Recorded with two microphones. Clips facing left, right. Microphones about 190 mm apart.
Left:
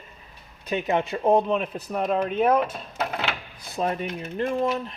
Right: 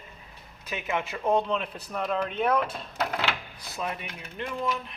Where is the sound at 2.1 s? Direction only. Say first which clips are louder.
Left 4 dB; 10° left (ahead or behind).